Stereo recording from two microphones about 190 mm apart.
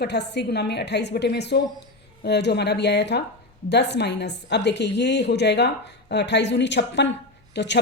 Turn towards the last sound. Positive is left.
turn(degrees=65)  # may be behind; listen again after turning